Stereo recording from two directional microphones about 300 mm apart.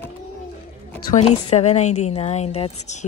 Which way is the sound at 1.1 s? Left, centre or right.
Left.